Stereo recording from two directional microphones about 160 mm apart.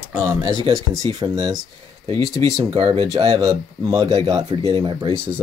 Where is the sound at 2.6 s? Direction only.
20° right (ahead or behind).